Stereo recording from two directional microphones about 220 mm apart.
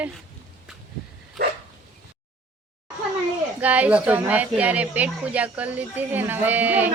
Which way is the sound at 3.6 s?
5° right (ahead or behind).